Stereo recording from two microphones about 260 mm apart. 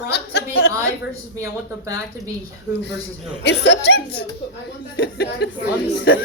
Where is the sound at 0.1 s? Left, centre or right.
Left.